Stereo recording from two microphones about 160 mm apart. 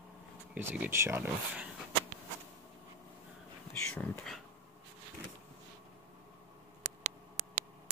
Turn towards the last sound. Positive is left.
turn(degrees=-45)  # may be behind; listen again after turning